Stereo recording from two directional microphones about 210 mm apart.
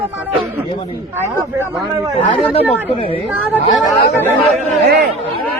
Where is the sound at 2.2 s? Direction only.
25° left (ahead or behind).